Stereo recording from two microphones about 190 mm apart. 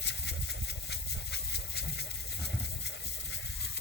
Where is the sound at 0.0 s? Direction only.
65° left (ahead or behind).